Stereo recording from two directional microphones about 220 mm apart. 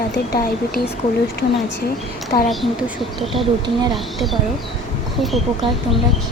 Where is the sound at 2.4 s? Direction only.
Centre (ahead or behind).